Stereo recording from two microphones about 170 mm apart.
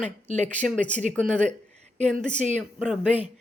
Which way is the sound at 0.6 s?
Centre (ahead or behind).